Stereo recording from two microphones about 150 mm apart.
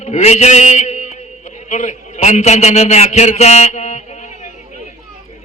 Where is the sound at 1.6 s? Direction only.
55° left (ahead or behind).